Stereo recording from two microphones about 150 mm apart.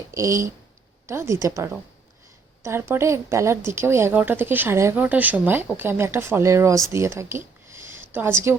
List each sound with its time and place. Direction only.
0.1 s a woman's voice: 20° right (ahead or behind)